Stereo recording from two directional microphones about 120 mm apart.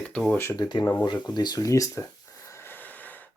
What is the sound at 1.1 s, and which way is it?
Speech, 35° left (ahead or behind).